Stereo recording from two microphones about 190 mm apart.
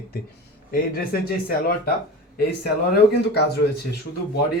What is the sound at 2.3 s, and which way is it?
A man's voice, 55° left (ahead or behind).